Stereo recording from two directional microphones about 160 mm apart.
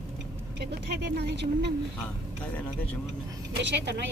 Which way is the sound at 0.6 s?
90° right.